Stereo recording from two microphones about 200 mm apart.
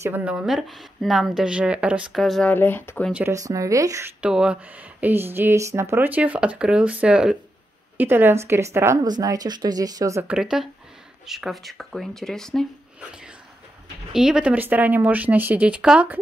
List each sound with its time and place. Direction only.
0.0 s a woman's voice: 10° right (ahead or behind); by 3.1 s 10° left (ahead or behind)
3.1 s speech: 10° right (ahead or behind)
4.2 s speech: 5° right (ahead or behind)
10.3 s a woman's voice: 5° right (ahead or behind)
14.1 s speech: 5° right (ahead or behind)